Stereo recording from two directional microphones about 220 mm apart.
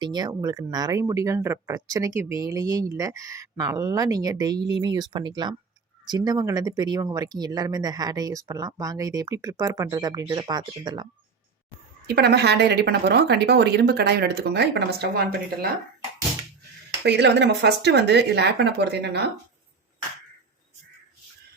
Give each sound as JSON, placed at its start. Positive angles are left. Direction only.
{"t": 0.0, "sound": "speech", "side_deg": -20}
{"t": 12.0, "sound": "speech", "side_deg": -45}
{"t": 17.0, "sound": "speech", "side_deg": -50}